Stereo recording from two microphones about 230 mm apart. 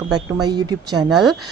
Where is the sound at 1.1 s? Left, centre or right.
Centre.